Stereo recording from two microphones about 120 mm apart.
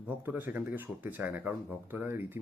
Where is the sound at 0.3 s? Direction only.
15° right (ahead or behind).